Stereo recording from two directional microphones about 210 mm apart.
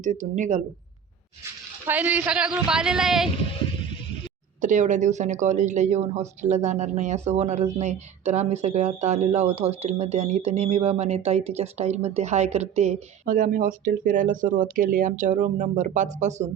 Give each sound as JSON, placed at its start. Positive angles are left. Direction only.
{"t": 0.0, "sound": "a woman's voice", "side_deg": -35}
{"t": 1.9, "sound": "speech", "side_deg": -10}
{"t": 4.6, "sound": "a woman's voice", "side_deg": -35}